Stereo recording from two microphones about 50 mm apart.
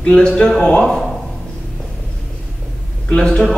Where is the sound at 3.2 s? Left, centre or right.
Centre.